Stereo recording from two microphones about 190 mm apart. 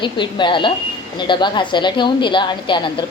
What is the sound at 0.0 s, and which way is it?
A woman's voice, 25° left (ahead or behind).